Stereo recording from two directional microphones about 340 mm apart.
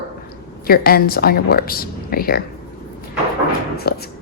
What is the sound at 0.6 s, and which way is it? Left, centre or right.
Speech, left.